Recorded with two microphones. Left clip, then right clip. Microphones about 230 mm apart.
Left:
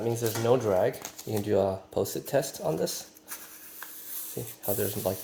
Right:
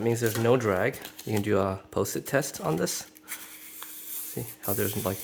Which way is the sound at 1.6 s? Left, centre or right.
Right.